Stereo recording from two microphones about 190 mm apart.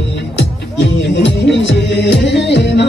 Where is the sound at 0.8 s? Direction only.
65° left (ahead or behind).